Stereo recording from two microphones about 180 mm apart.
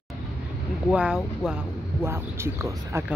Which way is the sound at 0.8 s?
5° right (ahead or behind).